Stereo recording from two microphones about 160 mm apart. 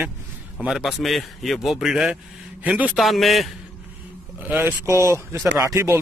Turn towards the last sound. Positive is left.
turn(degrees=-15)  # may be behind; listen again after turning